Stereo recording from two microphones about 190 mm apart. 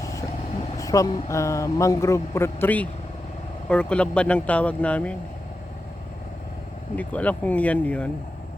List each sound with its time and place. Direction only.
0.0 s vehicle: 15° left (ahead or behind)
0.8 s a man's voice: 15° left (ahead or behind)
6.9 s a man's voice: 5° left (ahead or behind)